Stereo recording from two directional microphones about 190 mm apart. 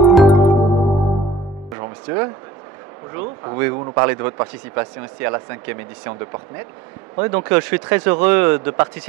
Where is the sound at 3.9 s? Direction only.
15° right (ahead or behind).